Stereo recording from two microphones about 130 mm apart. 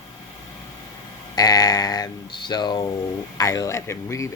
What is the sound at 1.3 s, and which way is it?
Speech, 30° left (ahead or behind).